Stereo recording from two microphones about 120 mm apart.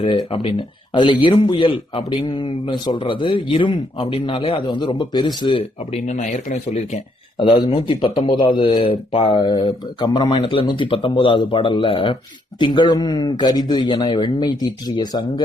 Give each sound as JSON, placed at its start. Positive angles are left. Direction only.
{"t": 0.0, "sound": "a man's voice", "side_deg": 45}
{"t": 5.9, "sound": "speech", "side_deg": 75}
{"t": 7.3, "sound": "a man's voice", "side_deg": 45}
{"t": 9.6, "sound": "a man's voice", "side_deg": 35}